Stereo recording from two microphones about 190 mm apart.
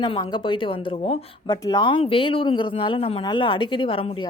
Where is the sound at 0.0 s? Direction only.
25° left (ahead or behind).